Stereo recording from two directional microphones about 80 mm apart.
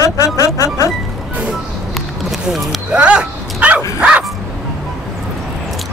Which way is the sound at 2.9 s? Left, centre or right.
Centre.